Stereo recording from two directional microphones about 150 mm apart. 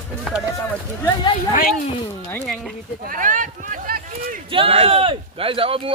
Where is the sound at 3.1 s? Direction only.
65° right (ahead or behind).